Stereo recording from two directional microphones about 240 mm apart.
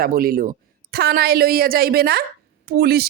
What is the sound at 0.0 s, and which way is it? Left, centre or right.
Speech, right.